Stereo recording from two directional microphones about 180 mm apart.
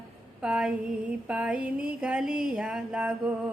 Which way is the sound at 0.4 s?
5° right (ahead or behind).